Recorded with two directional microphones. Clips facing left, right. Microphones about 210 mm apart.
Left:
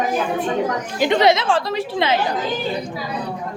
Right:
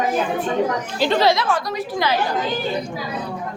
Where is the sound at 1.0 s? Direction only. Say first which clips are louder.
Left 2 dB; 20° left (ahead or behind).